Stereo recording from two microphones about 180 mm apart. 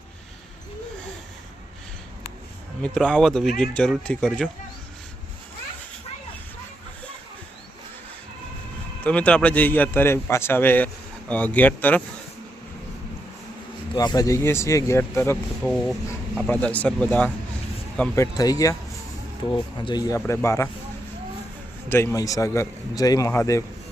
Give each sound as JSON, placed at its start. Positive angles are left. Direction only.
{"t": 2.8, "sound": "speech", "side_deg": 5}
{"t": 9.0, "sound": "speech", "side_deg": 5}
{"t": 13.9, "sound": "speech", "side_deg": 25}
{"t": 15.6, "sound": "speech", "side_deg": 5}
{"t": 21.8, "sound": "speech", "side_deg": 15}